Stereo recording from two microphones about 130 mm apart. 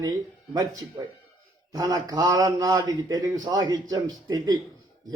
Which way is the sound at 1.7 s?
25° right (ahead or behind).